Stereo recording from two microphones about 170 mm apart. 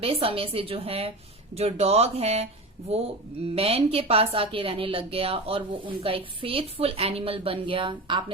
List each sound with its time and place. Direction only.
0.0 s a woman's voice: 35° right (ahead or behind)
3.5 s a woman's voice: 35° right (ahead or behind)